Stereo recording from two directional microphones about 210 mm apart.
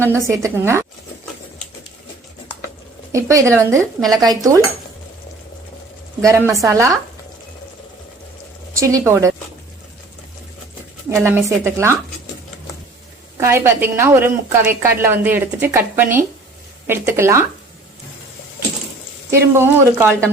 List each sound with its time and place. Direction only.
0.0 s a woman's voice: 15° right (ahead or behind)
3.1 s a woman's voice: 15° right (ahead or behind)
6.2 s a woman's voice: 15° right (ahead or behind)
8.7 s a woman's voice: 15° right (ahead or behind)
11.1 s a woman's voice: 10° right (ahead or behind)
13.3 s a woman's voice: 10° right (ahead or behind)
19.3 s a woman's voice: 10° right (ahead or behind)